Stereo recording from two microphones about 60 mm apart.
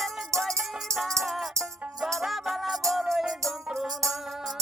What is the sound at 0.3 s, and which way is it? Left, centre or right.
Music, right.